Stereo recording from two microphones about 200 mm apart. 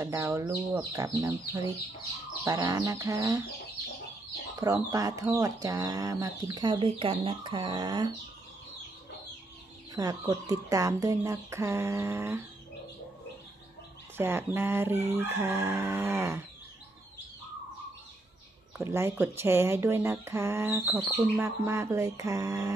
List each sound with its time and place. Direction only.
0.0 s speech: 15° right (ahead or behind)
2.4 s speech: 15° right (ahead or behind)
4.6 s speech: 15° right (ahead or behind)
9.9 s speech: 15° right (ahead or behind)
14.1 s speech: 10° right (ahead or behind)
18.9 s speech: 10° right (ahead or behind)